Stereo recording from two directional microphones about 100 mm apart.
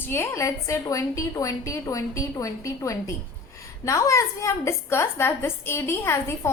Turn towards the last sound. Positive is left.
turn(degrees=25)  # may be behind; listen again after turning